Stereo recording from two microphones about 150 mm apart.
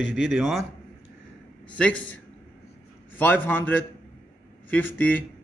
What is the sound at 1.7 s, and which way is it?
Speech, 10° left (ahead or behind).